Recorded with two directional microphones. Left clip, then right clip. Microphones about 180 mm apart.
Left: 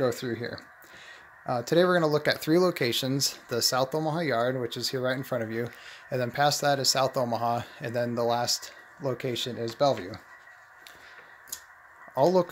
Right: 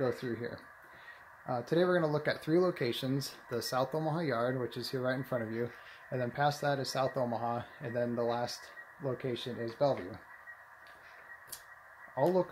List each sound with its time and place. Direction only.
0.0 s speech: 65° left (ahead or behind)
12.2 s speech: 60° left (ahead or behind)